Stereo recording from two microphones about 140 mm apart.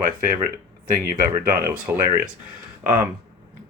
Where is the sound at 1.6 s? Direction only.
20° right (ahead or behind).